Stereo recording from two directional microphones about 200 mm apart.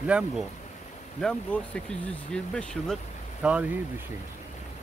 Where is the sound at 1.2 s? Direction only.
5° left (ahead or behind).